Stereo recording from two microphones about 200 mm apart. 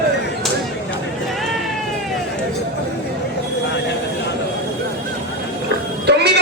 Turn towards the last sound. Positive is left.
turn(degrees=-55)  # may be behind; listen again after turning